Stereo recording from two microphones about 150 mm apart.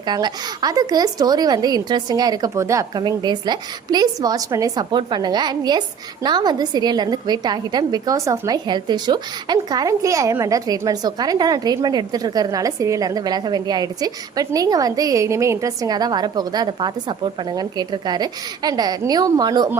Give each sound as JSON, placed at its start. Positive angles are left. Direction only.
{"t": 0.0, "sound": "a woman's voice", "side_deg": -30}